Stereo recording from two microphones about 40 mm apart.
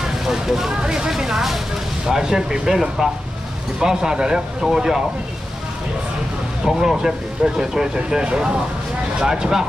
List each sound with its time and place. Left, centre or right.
0.0 s speech: centre
6.6 s speech: centre